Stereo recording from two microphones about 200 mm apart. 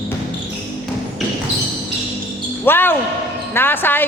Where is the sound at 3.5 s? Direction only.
10° left (ahead or behind).